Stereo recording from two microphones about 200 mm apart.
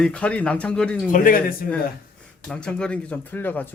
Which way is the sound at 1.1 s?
45° left (ahead or behind).